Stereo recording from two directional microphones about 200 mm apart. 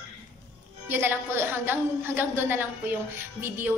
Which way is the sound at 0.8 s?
10° right (ahead or behind).